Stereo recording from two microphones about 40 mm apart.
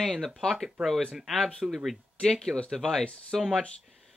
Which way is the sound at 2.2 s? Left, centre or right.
Centre.